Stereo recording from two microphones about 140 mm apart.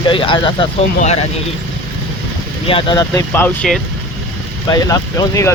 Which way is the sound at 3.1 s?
20° left (ahead or behind).